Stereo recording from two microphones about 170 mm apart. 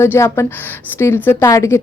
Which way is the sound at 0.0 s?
15° left (ahead or behind).